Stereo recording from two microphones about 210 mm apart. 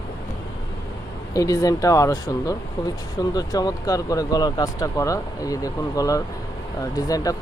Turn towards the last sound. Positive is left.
turn(degrees=15)  # may be behind; listen again after turning